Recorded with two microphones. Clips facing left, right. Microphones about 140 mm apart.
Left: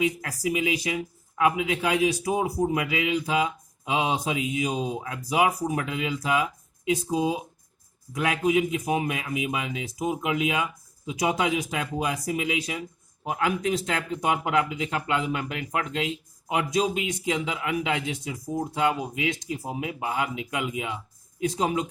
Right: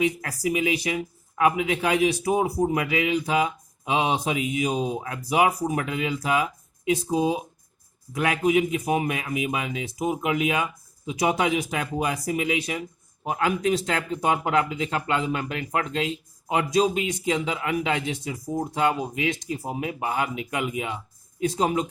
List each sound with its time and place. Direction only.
0.0 s speech: 50° right (ahead or behind)
13.8 s speech: 65° right (ahead or behind)
14.3 s speech: 45° right (ahead or behind)
18.1 s speech: 70° right (ahead or behind)
18.7 s speech: 55° right (ahead or behind)
21.4 s speech: 65° right (ahead or behind)